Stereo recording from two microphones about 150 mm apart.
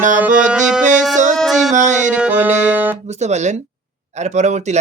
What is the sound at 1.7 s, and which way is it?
Music, 55° right (ahead or behind).